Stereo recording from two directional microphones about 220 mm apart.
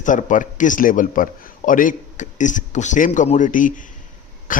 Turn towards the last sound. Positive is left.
turn(degrees=35)  # may be behind; listen again after turning